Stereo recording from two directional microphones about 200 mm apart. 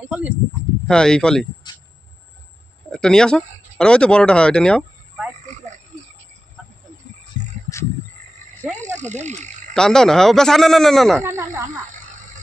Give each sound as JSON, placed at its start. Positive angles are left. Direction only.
{"t": 0.1, "sound": "speech", "side_deg": -10}
{"t": 0.8, "sound": "speech", "side_deg": 5}
{"t": 2.9, "sound": "speech", "side_deg": 5}
{"t": 5.4, "sound": "oink", "side_deg": -35}
{"t": 8.8, "sound": "a sound", "side_deg": -35}
{"t": 9.8, "sound": "speech", "side_deg": 0}
{"t": 11.2, "sound": "speech", "side_deg": -10}